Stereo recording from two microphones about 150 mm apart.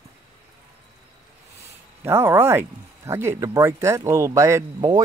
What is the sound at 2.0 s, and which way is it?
Speech, 15° right (ahead or behind).